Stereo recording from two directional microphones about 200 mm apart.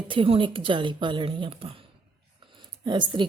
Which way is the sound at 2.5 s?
25° right (ahead or behind).